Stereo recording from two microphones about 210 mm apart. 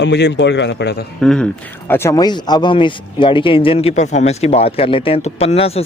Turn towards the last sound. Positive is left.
turn(degrees=30)  # may be behind; listen again after turning